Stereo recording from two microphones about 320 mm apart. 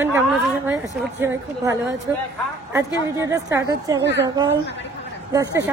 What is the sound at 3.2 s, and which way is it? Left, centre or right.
Speech, centre.